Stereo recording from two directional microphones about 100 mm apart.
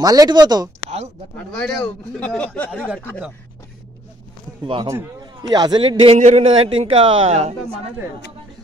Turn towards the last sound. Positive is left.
turn(degrees=-90)